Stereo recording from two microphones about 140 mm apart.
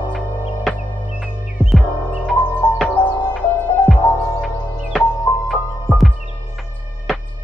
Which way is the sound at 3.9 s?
Centre (ahead or behind).